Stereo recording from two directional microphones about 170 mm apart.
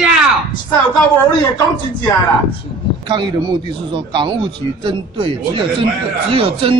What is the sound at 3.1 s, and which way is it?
Speech, 25° right (ahead or behind).